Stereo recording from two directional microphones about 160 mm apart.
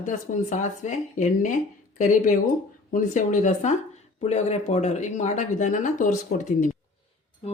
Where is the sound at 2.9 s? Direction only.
50° left (ahead or behind).